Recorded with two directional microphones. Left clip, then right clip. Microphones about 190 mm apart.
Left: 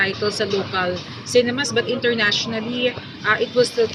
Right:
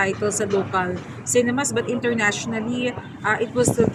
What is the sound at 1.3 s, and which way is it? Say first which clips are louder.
Speech: left 3 dB; 60° right (ahead or behind).